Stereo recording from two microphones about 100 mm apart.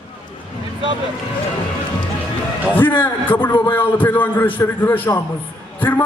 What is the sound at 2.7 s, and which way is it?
A man's voice, 20° left (ahead or behind).